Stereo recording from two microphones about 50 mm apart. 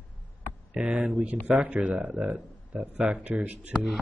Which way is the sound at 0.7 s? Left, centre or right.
Centre.